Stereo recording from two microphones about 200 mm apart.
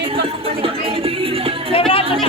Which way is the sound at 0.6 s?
25° right (ahead or behind).